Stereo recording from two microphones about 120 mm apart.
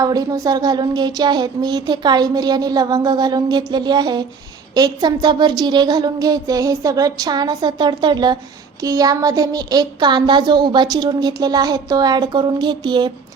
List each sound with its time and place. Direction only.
0.0 s speech: 30° right (ahead or behind)